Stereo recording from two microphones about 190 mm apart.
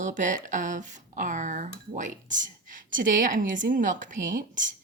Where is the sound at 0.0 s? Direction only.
40° right (ahead or behind).